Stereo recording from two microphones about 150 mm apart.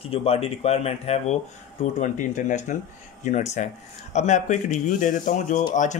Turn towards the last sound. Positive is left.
turn(degrees=55)  # may be behind; listen again after turning